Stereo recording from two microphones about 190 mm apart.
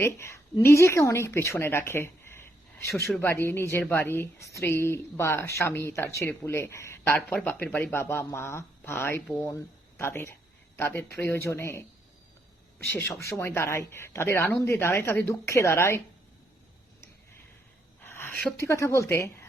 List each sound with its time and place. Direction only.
0.0 s a woman's voice: 15° left (ahead or behind)
7.2 s a woman's voice: 5° left (ahead or behind)
12.9 s a woman's voice: 10° left (ahead or behind)
18.0 s speech: 10° left (ahead or behind)